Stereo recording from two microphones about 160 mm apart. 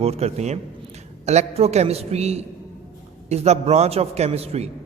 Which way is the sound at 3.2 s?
40° right (ahead or behind).